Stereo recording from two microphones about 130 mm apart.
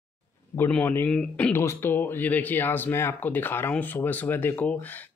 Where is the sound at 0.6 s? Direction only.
10° left (ahead or behind).